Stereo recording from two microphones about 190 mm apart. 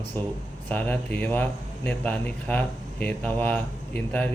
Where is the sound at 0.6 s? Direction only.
10° left (ahead or behind).